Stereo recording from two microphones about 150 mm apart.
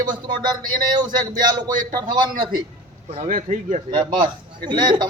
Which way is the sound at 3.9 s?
30° right (ahead or behind).